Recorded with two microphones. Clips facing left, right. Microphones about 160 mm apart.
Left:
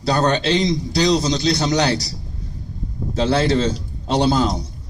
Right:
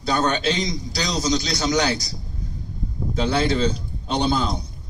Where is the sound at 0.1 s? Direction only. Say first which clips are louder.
Left 3 dB; 35° left (ahead or behind).